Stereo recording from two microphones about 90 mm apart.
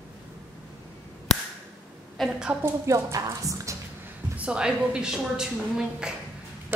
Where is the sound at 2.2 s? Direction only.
5° right (ahead or behind).